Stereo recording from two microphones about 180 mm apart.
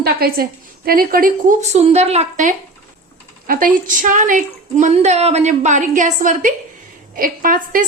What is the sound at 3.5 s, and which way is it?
Speech, 50° right (ahead or behind).